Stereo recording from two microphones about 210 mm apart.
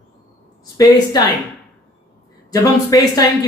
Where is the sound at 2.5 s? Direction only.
15° left (ahead or behind).